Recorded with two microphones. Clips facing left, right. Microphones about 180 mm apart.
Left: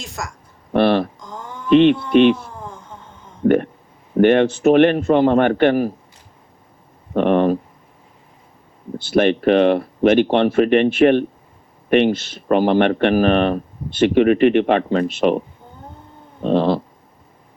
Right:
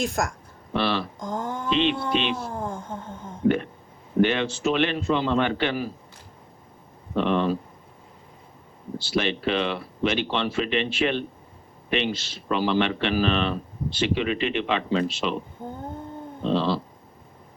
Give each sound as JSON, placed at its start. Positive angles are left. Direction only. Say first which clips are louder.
{"t": 0.0, "sound": "a woman's voice", "louder": "right 5 dB", "side_deg": -55}
{"t": 0.7, "sound": "speech", "louder": "left 10 dB", "side_deg": 55}
{"t": 1.2, "sound": "a sound", "louder": "right 5 dB", "side_deg": -50}
{"t": 1.7, "sound": "speech", "louder": "left 12 dB", "side_deg": 55}
{"t": 2.5, "sound": "a sound", "louder": "right 4 dB", "side_deg": -50}
{"t": 3.4, "sound": "speech", "louder": "left 7 dB", "side_deg": 55}
{"t": 7.1, "sound": "speech", "louder": "left 7 dB", "side_deg": 55}
{"t": 9.0, "sound": "speech", "louder": "left 10 dB", "side_deg": 55}
{"t": 16.4, "sound": "a sound", "louder": "left 7 dB", "side_deg": 55}